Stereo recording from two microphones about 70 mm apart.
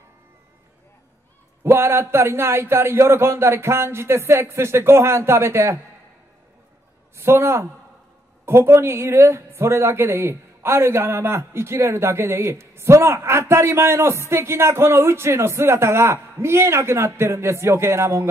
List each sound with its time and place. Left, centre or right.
1.6 s a woman's voice: right
7.2 s a woman's voice: right